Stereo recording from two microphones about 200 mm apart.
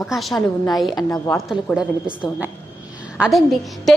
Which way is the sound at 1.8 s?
5° right (ahead or behind).